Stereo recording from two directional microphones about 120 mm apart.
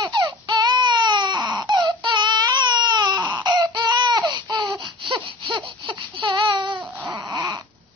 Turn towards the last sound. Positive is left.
turn(degrees=-30)  # may be behind; listen again after turning